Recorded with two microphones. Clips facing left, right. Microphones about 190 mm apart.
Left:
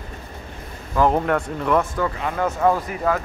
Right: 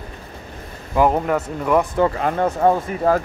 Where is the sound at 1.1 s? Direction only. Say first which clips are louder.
Even; 5° right (ahead or behind).